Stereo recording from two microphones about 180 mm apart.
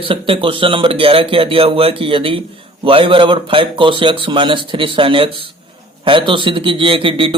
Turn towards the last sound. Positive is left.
turn(degrees=-30)  # may be behind; listen again after turning